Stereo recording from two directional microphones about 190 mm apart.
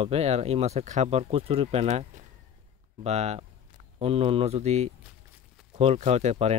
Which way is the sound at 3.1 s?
35° right (ahead or behind).